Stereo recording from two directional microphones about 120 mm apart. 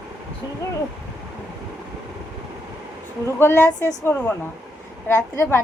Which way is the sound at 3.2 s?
20° left (ahead or behind).